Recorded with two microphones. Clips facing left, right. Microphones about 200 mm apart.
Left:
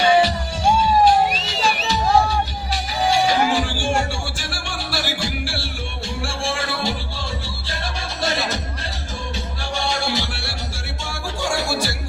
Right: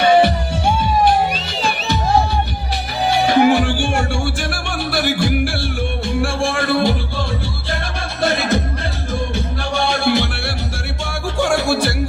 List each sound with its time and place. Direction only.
0.0 s music: 60° right (ahead or behind)
3.1 s music: 60° right (ahead or behind)